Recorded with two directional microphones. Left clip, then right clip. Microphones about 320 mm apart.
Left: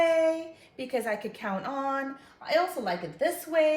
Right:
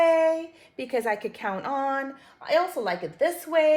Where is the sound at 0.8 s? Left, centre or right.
Right.